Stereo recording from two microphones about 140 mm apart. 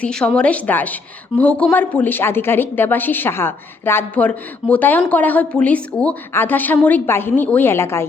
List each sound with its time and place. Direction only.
0.0 s a woman's voice: 5° left (ahead or behind)